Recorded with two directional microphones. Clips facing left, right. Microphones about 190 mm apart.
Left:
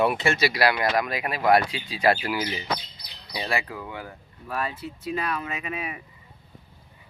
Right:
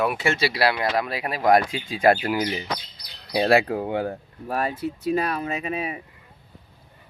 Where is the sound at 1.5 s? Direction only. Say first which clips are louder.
Right 2 dB; 45° right (ahead or behind).